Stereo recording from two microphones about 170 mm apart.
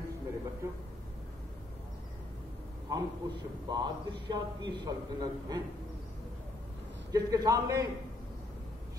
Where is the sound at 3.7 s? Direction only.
25° right (ahead or behind).